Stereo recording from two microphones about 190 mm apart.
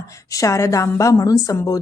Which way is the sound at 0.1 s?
15° left (ahead or behind).